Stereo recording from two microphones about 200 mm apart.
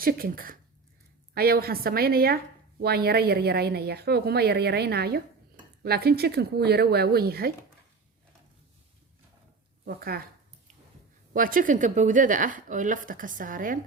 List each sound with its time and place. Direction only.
0.0 s a woman's voice: 45° right (ahead or behind)
9.8 s a woman's voice: 45° right (ahead or behind)
11.3 s speech: 45° right (ahead or behind)